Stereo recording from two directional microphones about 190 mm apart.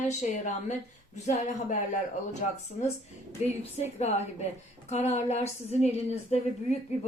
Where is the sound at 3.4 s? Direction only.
35° left (ahead or behind).